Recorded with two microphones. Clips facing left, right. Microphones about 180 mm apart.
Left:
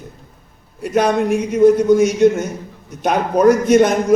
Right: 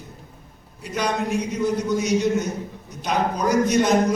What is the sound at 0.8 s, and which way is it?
A man's voice, 55° left (ahead or behind).